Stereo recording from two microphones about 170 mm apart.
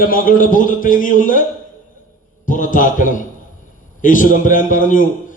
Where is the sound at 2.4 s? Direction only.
50° left (ahead or behind).